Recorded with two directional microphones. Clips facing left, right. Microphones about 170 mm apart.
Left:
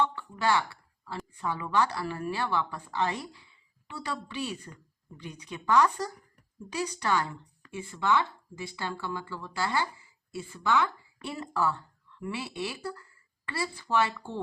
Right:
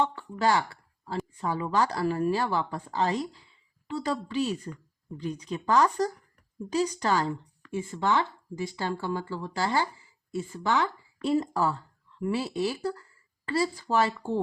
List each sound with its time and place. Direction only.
0.0 s speech: 45° right (ahead or behind)